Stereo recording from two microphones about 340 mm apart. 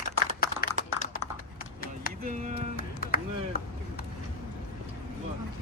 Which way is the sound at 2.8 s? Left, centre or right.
Left.